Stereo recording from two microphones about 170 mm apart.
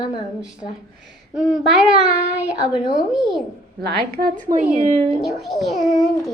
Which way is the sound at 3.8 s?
65° right (ahead or behind).